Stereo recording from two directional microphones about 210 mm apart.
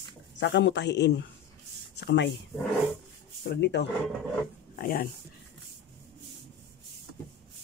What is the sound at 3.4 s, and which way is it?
Speech, 55° left (ahead or behind).